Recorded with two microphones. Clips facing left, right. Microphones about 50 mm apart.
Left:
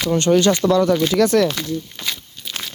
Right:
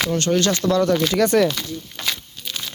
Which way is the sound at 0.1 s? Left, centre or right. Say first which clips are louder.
Left 8 dB; centre.